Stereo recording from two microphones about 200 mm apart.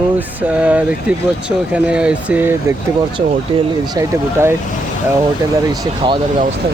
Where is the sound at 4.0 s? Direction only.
15° right (ahead or behind).